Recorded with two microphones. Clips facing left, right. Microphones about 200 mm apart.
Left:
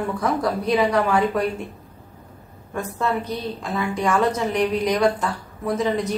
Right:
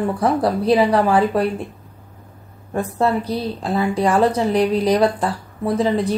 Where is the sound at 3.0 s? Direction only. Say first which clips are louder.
Right 5 dB; 30° right (ahead or behind).